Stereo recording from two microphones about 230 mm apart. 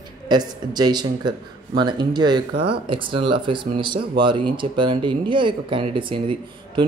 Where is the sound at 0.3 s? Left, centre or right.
Centre.